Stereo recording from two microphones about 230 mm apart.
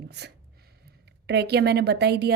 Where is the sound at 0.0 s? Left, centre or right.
Right.